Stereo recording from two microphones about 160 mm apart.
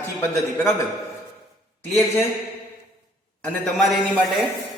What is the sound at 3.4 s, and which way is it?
Speech, centre (ahead or behind).